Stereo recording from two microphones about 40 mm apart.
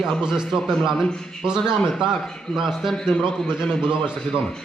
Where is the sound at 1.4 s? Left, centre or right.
Right.